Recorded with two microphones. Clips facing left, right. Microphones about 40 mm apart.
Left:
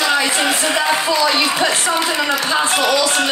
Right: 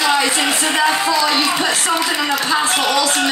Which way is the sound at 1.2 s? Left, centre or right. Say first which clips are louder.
Left 1 dB; left.